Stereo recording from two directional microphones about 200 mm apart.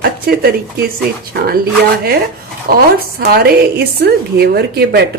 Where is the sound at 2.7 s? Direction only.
50° right (ahead or behind).